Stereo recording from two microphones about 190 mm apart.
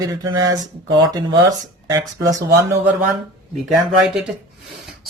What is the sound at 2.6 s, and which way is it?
Speech, 15° right (ahead or behind).